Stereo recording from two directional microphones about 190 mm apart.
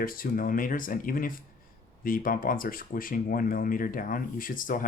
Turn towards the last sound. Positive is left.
turn(degrees=45)  # may be behind; listen again after turning